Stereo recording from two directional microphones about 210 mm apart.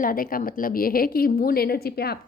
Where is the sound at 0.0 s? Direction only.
45° left (ahead or behind).